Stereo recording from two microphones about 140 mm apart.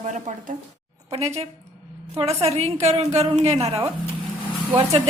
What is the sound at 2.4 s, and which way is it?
A woman's voice, 45° right (ahead or behind).